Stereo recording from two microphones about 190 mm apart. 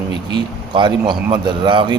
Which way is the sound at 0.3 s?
25° right (ahead or behind).